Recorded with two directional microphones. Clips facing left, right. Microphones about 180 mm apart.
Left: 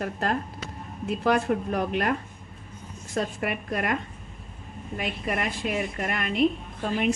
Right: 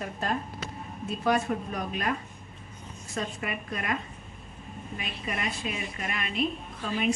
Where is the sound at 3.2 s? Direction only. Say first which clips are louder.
Left 5 dB; 60° left (ahead or behind).